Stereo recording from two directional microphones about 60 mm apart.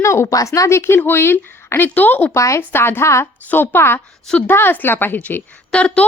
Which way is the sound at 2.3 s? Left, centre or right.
Left.